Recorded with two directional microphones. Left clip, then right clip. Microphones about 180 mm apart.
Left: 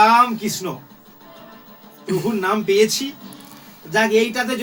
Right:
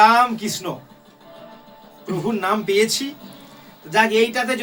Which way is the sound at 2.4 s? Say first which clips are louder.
Left 1 dB; 25° right (ahead or behind).